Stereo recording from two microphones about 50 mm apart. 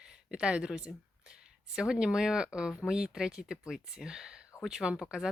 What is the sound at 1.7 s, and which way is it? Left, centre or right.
Speech, centre.